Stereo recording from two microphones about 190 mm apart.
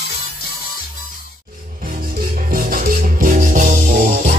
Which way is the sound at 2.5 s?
45° right (ahead or behind).